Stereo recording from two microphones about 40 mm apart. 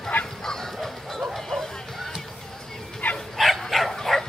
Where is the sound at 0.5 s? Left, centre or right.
Centre.